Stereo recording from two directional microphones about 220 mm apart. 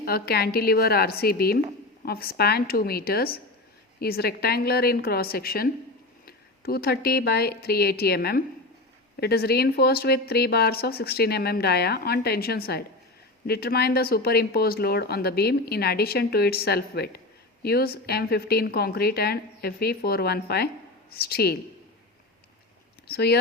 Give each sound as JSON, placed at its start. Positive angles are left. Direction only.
{"t": 0.0, "sound": "speech", "side_deg": 45}
{"t": 23.0, "sound": "speech", "side_deg": 45}